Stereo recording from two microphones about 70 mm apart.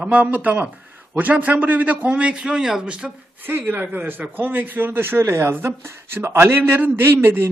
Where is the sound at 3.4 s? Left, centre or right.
Right.